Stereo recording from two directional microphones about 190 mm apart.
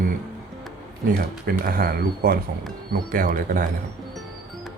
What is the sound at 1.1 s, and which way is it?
Speech, 50° right (ahead or behind).